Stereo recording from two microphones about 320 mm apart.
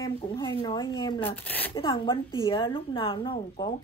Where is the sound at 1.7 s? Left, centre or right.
Centre.